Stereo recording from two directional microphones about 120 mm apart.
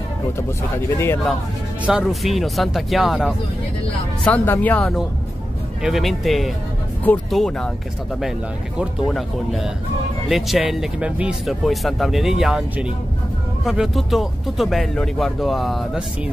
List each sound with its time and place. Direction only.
0.4 s speech: 20° left (ahead or behind)
1.9 s speech: 5° right (ahead or behind)
4.2 s speech: 15° left (ahead or behind)
5.8 s speech: centre (ahead or behind)
9.1 s speech: centre (ahead or behind)
13.7 s speech: centre (ahead or behind)